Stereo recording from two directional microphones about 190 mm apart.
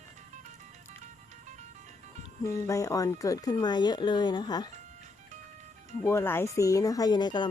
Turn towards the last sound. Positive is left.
turn(degrees=25)  # may be behind; listen again after turning